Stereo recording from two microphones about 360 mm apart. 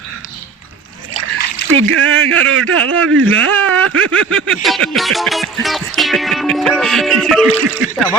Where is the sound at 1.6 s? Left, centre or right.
Right.